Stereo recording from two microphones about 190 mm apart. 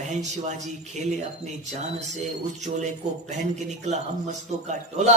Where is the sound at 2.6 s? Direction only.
40° right (ahead or behind).